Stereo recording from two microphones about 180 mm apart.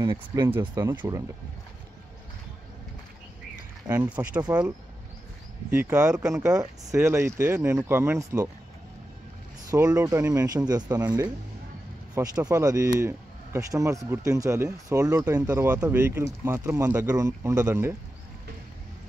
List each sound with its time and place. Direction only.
0.0 s speech: 20° right (ahead or behind)
3.8 s speech: 20° right (ahead or behind)
4.1 s speech: 5° right (ahead or behind)
5.7 s speech: 15° right (ahead or behind)
9.7 s speech: 20° right (ahead or behind)